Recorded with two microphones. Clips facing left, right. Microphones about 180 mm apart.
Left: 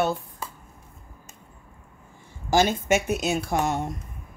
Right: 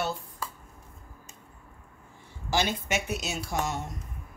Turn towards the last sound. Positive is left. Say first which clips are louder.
# left 6 dB
turn(degrees=55)  # may be behind; listen again after turning